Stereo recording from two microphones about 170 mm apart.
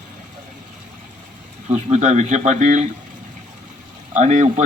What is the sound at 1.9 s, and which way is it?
A man's voice, 45° right (ahead or behind).